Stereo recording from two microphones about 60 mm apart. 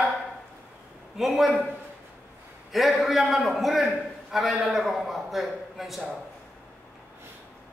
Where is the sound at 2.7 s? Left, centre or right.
Centre.